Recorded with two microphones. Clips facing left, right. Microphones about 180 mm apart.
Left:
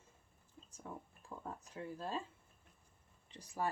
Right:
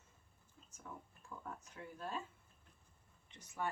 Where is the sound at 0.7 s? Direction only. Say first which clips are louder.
Left 3 dB; 30° left (ahead or behind).